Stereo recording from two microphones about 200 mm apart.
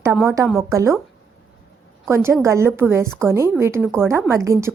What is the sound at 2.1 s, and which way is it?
A woman's voice, 15° right (ahead or behind).